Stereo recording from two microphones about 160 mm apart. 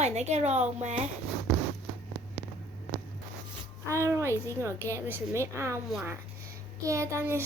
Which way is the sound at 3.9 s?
20° right (ahead or behind).